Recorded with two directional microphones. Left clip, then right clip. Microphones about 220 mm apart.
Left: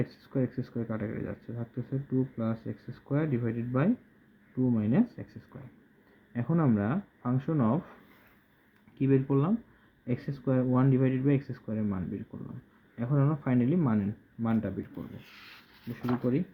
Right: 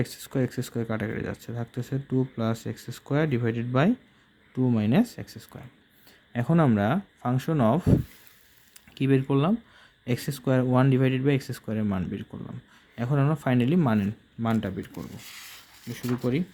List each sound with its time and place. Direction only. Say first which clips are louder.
0.0 s speech: right 4 dB; 40° right (ahead or behind)
9.0 s speech: right 3 dB; 40° right (ahead or behind)
15.2 s speech: right 8 dB; 10° left (ahead or behind)